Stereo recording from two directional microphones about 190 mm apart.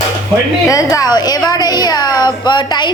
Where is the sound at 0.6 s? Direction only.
15° left (ahead or behind).